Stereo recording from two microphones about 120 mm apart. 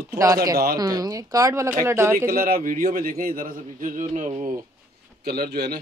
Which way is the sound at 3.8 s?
90° right.